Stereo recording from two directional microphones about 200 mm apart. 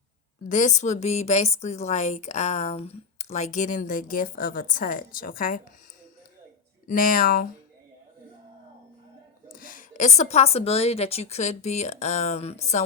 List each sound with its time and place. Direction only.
0.4 s a woman's voice: 40° left (ahead or behind)
6.8 s speech: 45° left (ahead or behind)
9.5 s a woman's voice: 45° left (ahead or behind)